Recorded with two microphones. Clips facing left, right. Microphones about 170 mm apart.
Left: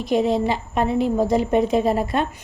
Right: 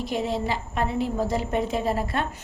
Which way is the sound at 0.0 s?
20° left (ahead or behind).